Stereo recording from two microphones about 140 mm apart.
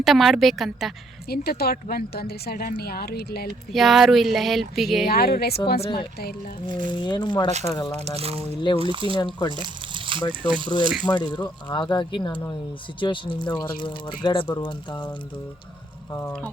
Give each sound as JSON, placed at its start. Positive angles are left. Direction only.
{"t": 0.0, "sound": "speech", "side_deg": 0}
{"t": 1.3, "sound": "a woman's voice", "side_deg": 90}
{"t": 3.7, "sound": "speech", "side_deg": 0}
{"t": 5.0, "sound": "a woman's voice", "side_deg": 90}
{"t": 5.8, "sound": "speech", "side_deg": 40}
{"t": 8.0, "sound": "speech", "side_deg": -50}
{"t": 11.1, "sound": "speech", "side_deg": 20}
{"t": 11.4, "sound": "speech", "side_deg": 30}